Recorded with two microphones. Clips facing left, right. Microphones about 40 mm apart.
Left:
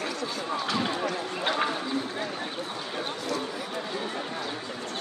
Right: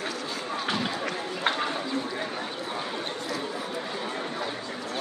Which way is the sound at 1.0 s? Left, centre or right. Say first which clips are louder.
Even; right.